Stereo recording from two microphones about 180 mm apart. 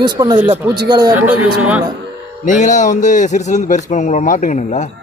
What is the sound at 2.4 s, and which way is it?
A man's voice, 45° left (ahead or behind).